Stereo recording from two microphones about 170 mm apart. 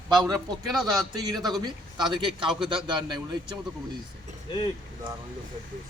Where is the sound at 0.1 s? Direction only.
20° right (ahead or behind).